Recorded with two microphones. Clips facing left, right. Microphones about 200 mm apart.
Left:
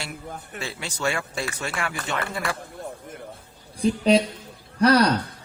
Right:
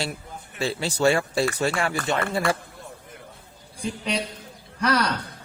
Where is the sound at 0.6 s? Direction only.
35° right (ahead or behind).